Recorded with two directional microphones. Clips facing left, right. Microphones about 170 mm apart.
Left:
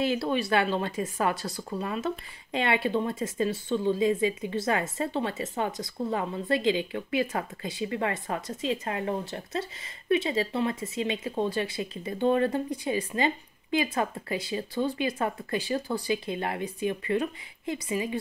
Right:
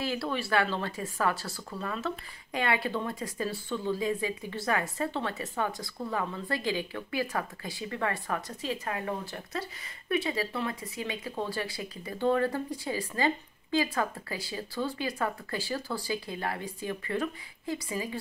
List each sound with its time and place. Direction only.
0.0 s speech: 20° left (ahead or behind)